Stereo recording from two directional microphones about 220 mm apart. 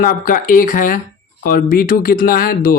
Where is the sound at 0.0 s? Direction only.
40° left (ahead or behind).